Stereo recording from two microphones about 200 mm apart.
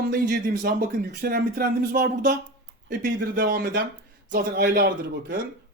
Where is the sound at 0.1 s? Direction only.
45° right (ahead or behind).